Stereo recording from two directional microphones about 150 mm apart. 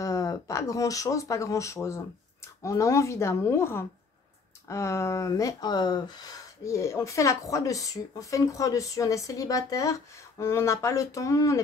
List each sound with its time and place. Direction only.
0.0 s speech: 20° left (ahead or behind)